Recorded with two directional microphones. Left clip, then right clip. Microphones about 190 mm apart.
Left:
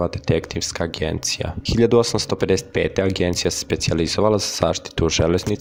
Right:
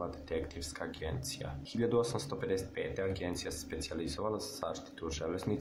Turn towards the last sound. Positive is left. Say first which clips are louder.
# left 19 dB
turn(degrees=45)  # may be behind; listen again after turning